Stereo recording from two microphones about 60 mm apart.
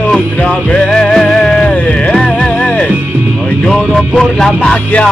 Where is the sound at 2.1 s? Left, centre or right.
Centre.